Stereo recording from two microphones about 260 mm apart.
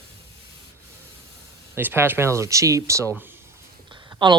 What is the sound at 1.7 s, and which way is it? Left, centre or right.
Speech, centre.